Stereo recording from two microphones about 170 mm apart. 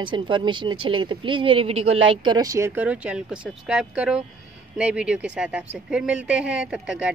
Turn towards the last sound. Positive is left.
turn(degrees=-5)  # may be behind; listen again after turning